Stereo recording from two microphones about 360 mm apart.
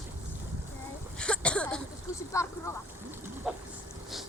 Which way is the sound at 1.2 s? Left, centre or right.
Centre.